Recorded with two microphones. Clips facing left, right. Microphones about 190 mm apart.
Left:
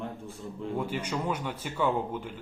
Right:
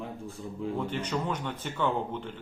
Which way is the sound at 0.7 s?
10° left (ahead or behind).